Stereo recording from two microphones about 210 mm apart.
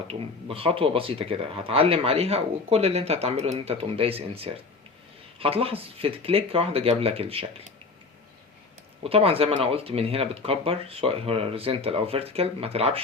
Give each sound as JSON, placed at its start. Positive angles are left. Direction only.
{"t": 0.1, "sound": "speech", "side_deg": -25}
{"t": 9.0, "sound": "speech", "side_deg": -25}